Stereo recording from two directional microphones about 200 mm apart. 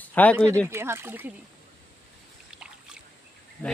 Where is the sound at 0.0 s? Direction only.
10° left (ahead or behind).